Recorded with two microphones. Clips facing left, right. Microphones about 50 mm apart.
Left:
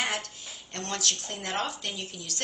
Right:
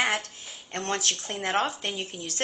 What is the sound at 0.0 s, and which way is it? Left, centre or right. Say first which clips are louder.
A woman's voice: right 4 dB; right.